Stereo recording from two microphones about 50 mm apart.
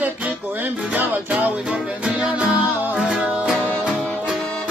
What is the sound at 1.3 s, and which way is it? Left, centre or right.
Music, right.